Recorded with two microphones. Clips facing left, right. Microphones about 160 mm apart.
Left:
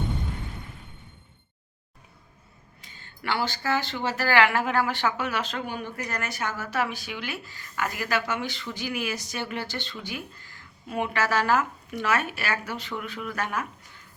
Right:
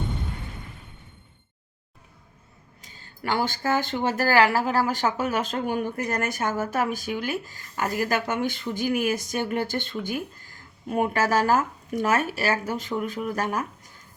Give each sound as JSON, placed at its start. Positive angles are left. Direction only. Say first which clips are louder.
{"t": 2.8, "sound": "speech", "louder": "right 2 dB", "side_deg": -35}